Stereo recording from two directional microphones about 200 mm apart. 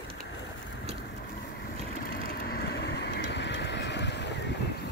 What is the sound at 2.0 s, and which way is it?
Vehicle, 45° left (ahead or behind).